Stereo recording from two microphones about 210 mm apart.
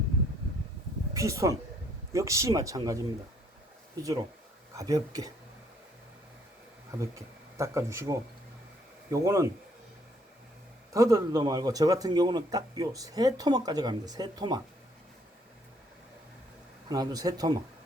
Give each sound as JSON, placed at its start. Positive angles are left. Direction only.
{"t": 1.1, "sound": "speech", "side_deg": -15}
{"t": 7.0, "sound": "speech", "side_deg": -15}
{"t": 10.9, "sound": "speech", "side_deg": -15}
{"t": 16.9, "sound": "speech", "side_deg": -20}